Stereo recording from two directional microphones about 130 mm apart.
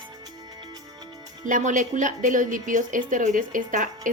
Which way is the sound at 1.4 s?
80° right.